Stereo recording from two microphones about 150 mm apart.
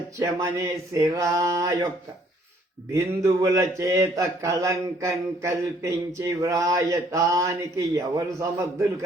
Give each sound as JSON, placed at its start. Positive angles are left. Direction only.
{"t": 0.2, "sound": "speech", "side_deg": -20}
{"t": 2.9, "sound": "speech", "side_deg": -20}